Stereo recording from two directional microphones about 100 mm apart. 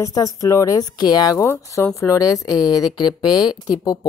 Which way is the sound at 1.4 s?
25° left (ahead or behind).